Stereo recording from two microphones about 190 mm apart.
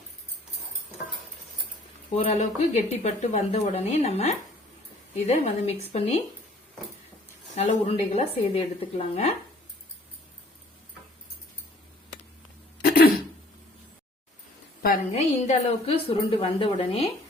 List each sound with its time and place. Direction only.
2.1 s speech: 35° left (ahead or behind)
7.5 s speech: 35° left (ahead or behind)
12.8 s throat clearing: 50° left (ahead or behind)
15.1 s speech: 35° left (ahead or behind)